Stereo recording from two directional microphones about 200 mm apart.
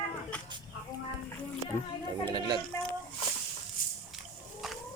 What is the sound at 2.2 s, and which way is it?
Speech, 20° right (ahead or behind).